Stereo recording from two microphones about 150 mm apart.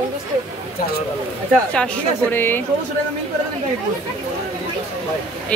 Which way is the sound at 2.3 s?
15° left (ahead or behind).